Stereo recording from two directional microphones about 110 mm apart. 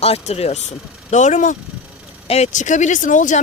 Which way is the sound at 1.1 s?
90° left.